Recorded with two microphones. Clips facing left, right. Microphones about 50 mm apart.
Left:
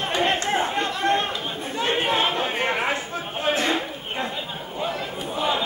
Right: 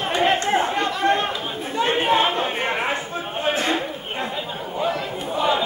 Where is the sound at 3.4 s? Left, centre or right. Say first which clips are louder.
Even; right.